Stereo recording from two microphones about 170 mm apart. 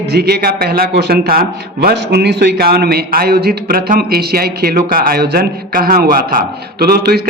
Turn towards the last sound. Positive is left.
turn(degrees=-65)  # may be behind; listen again after turning